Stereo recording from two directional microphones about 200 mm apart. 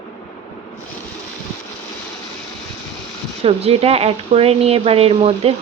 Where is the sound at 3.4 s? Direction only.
30° right (ahead or behind).